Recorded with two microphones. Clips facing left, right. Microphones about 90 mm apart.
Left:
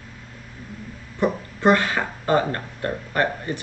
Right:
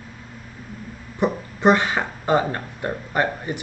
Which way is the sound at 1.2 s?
20° right (ahead or behind).